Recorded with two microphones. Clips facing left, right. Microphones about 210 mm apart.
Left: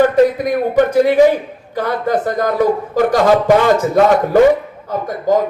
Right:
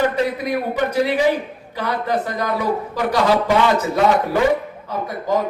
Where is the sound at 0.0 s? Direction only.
50° left (ahead or behind).